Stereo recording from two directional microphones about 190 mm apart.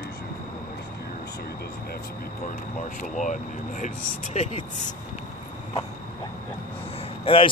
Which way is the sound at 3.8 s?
35° left (ahead or behind).